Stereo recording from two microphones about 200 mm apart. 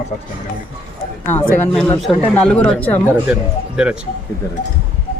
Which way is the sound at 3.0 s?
5° right (ahead or behind).